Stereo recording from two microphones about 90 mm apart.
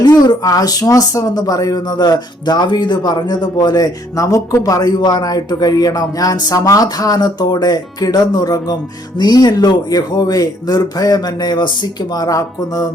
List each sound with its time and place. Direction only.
0.0 s speech: 50° left (ahead or behind)
12.1 s speech: 45° left (ahead or behind)